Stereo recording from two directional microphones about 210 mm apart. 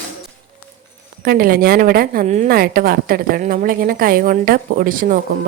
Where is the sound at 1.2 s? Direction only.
45° right (ahead or behind).